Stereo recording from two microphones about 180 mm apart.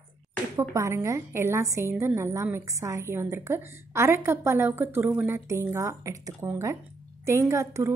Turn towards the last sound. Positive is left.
turn(degrees=-15)  # may be behind; listen again after turning